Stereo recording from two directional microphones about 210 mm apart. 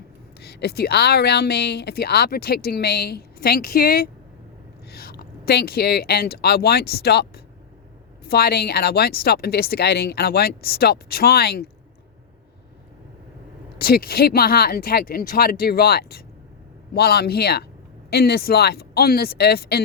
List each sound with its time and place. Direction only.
0.3 s speech: 50° left (ahead or behind)
13.7 s speech: 45° left (ahead or behind)